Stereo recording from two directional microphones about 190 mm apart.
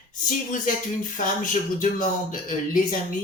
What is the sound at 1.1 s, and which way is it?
Speech, 45° left (ahead or behind).